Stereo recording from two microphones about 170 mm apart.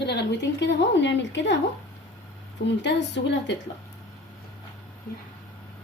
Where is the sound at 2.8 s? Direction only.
90° left.